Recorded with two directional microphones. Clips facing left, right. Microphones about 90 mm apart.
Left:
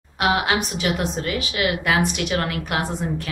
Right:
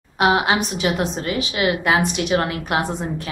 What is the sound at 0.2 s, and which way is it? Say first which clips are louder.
A woman's voice: right 3 dB; 25° right (ahead or behind).